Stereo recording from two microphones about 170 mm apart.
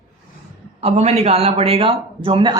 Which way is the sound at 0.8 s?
35° right (ahead or behind).